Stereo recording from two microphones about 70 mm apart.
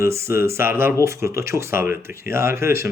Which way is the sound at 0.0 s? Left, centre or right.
Right.